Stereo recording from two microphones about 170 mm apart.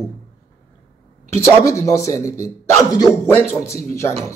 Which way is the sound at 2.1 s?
45° right (ahead or behind).